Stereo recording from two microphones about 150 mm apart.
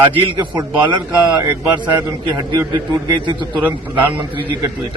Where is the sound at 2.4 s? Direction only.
30° right (ahead or behind).